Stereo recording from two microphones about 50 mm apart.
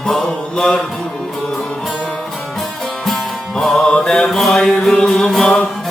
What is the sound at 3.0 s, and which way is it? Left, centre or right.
Music, centre.